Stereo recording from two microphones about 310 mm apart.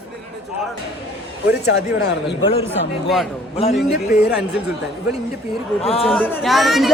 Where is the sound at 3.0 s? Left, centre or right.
Centre.